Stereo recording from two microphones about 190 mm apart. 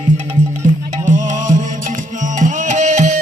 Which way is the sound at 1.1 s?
40° right (ahead or behind).